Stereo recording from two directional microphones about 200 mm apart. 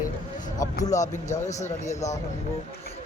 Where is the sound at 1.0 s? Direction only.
35° left (ahead or behind).